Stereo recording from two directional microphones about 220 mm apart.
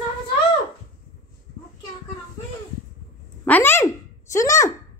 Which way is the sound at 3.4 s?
10° left (ahead or behind).